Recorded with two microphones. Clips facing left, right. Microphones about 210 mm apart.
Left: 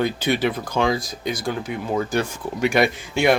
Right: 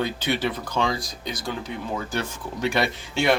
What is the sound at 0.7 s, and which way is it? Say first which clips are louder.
Speech: left 4 dB; 55° left (ahead or behind).